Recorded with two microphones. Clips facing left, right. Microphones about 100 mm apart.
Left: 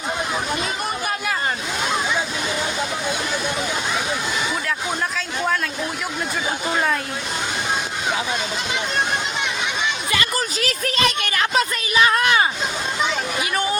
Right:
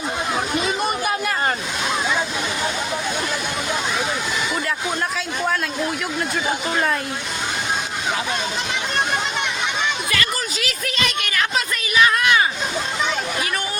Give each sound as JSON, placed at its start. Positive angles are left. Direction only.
{"t": 10.6, "sound": "a woman's voice", "side_deg": 40}